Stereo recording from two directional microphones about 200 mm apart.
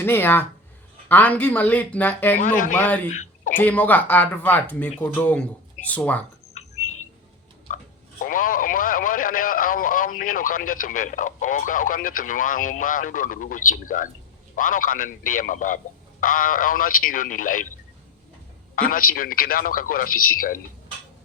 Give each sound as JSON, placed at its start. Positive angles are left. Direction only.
{"t": 0.0, "sound": "speech", "side_deg": 10}
{"t": 2.4, "sound": "a man's voice", "side_deg": 40}
{"t": 2.7, "sound": "speech", "side_deg": 10}
{"t": 3.1, "sound": "a sound", "side_deg": 35}
{"t": 3.6, "sound": "speech", "side_deg": 10}
{"t": 6.6, "sound": "bird", "side_deg": 35}
{"t": 8.2, "sound": "a man's voice", "side_deg": 45}
{"t": 18.8, "sound": "a man's voice", "side_deg": 45}